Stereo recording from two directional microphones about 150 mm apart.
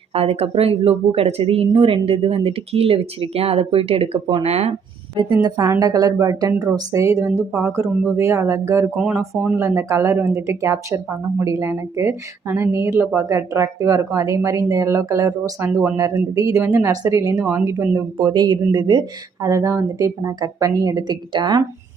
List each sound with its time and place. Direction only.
0.1 s speech: 40° right (ahead or behind)
5.4 s speech: 25° right (ahead or behind)
9.0 s speech: 5° right (ahead or behind)
9.6 s speech: 20° right (ahead or behind)
18.2 s speech: 30° right (ahead or behind)